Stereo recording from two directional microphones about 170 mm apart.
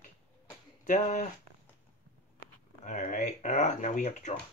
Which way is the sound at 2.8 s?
50° left (ahead or behind).